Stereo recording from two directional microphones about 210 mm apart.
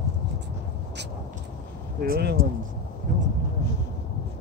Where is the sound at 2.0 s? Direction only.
45° right (ahead or behind).